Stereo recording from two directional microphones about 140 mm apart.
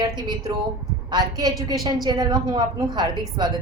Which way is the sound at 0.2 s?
30° right (ahead or behind).